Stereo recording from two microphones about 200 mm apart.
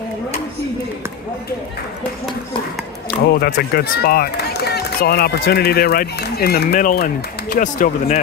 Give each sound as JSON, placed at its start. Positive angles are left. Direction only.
{"t": 3.3, "sound": "speech", "side_deg": 50}